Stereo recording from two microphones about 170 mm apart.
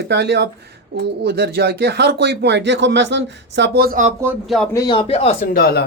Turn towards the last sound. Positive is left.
turn(degrees=65)  # may be behind; listen again after turning